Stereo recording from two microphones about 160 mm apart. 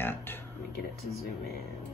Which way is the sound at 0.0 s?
15° left (ahead or behind).